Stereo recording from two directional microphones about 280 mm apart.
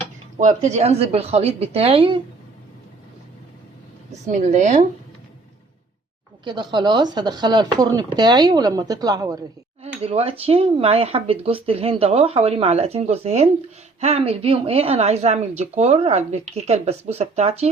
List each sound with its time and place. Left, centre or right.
0.3 s speech: right
4.1 s speech: right
6.4 s speech: centre